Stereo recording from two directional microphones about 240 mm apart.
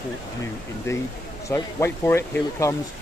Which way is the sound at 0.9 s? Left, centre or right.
Centre.